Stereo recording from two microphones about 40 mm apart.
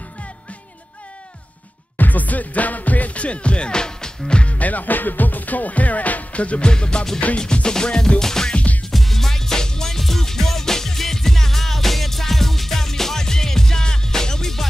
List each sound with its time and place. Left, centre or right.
2.0 s music: left
4.6 s music: left
6.7 s music: left